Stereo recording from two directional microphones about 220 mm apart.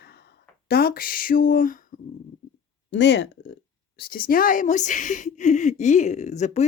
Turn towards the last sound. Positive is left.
turn(degrees=30)  # may be behind; listen again after turning